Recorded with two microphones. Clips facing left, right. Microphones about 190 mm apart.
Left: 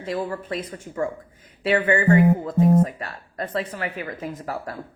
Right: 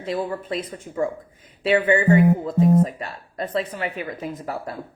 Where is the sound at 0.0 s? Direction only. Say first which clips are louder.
Right 1 dB; 25° right (ahead or behind).